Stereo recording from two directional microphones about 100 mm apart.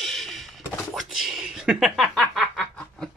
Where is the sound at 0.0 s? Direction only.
Centre (ahead or behind).